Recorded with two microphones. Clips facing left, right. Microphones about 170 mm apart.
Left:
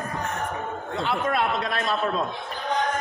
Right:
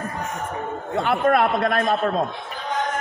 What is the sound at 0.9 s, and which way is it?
A man's voice, 55° right (ahead or behind).